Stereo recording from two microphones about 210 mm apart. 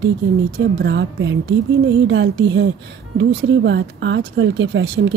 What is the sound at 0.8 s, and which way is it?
Speech, 55° right (ahead or behind).